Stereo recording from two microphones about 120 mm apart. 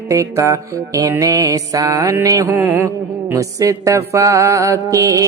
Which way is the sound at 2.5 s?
15° right (ahead or behind).